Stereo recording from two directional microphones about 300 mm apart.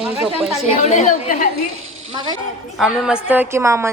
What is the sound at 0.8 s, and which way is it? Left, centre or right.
Speech, left.